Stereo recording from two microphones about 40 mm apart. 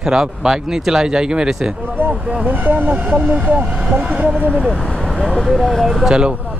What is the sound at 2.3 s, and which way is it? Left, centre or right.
Speech, right.